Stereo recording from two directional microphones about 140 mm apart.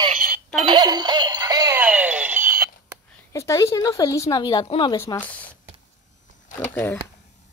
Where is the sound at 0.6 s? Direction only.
30° right (ahead or behind).